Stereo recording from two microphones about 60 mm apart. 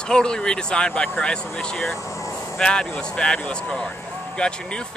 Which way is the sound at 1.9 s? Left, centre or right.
Left.